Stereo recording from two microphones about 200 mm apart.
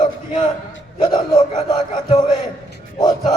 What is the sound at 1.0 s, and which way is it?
Speech, 25° left (ahead or behind).